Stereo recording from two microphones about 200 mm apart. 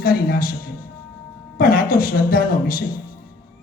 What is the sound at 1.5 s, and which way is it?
Speech, 45° left (ahead or behind).